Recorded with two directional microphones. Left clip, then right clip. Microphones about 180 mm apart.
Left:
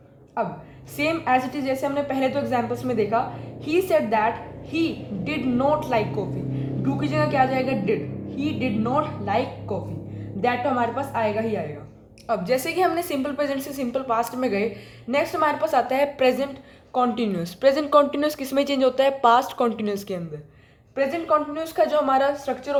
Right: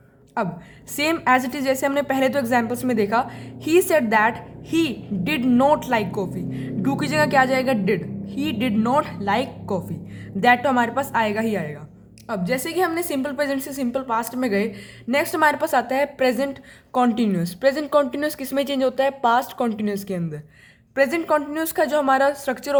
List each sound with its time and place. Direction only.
0.9 s a woman's voice: 30° right (ahead or behind)